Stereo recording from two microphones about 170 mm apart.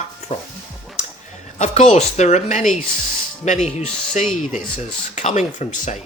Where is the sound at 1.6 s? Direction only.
40° left (ahead or behind).